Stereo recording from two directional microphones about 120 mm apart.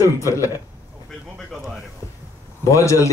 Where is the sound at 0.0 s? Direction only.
25° left (ahead or behind).